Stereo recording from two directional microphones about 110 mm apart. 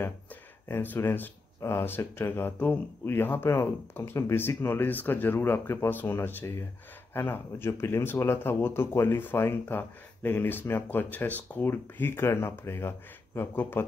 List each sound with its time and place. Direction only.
0.7 s speech: 20° left (ahead or behind)